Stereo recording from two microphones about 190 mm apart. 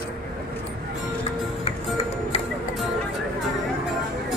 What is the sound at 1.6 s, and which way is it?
Music, 30° left (ahead or behind).